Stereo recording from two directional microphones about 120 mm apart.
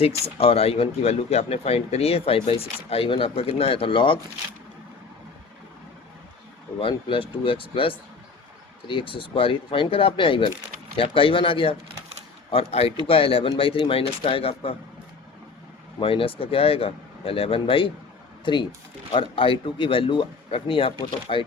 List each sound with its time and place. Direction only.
0.0 s speech: 55° left (ahead or behind)
6.7 s speech: 50° left (ahead or behind)
16.0 s speech: 50° left (ahead or behind)